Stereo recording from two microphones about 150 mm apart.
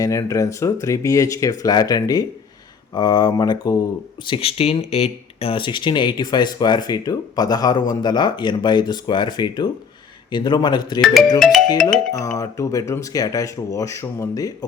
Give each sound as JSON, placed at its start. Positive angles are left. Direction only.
{"t": 0.0, "sound": "speech", "side_deg": 20}
{"t": 4.3, "sound": "speech", "side_deg": 40}
{"t": 11.0, "sound": "music", "side_deg": 0}
{"t": 12.4, "sound": "speech", "side_deg": 20}